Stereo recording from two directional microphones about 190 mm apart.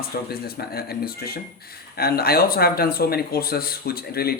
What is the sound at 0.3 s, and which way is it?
A man's voice, 55° left (ahead or behind).